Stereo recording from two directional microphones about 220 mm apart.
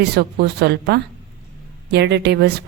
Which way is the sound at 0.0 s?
50° right (ahead or behind).